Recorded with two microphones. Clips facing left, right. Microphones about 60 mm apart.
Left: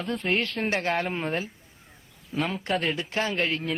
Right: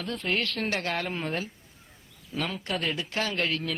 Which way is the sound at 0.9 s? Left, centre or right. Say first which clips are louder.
Left 3 dB; centre.